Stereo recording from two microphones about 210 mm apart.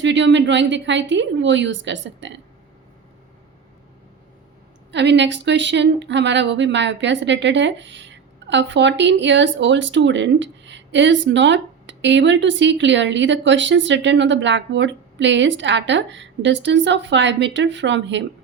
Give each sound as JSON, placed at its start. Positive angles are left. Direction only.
{"t": 0.0, "sound": "speech", "side_deg": -60}
{"t": 4.9, "sound": "speech", "side_deg": -55}